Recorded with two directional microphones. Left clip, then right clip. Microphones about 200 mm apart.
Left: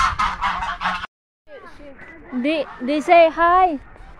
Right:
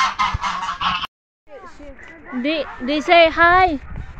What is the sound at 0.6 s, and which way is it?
Goose, 15° left (ahead or behind).